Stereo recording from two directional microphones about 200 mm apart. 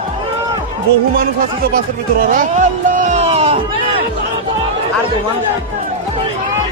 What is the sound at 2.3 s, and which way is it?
Speech, 40° right (ahead or behind).